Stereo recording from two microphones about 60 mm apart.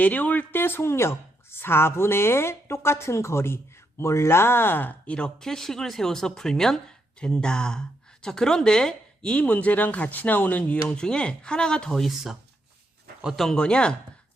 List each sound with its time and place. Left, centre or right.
0.0 s a woman's voice: left
5.0 s a woman's voice: centre
5.5 s a woman's voice: centre
9.4 s speech: left
10.6 s a woman's voice: centre
13.5 s a woman's voice: centre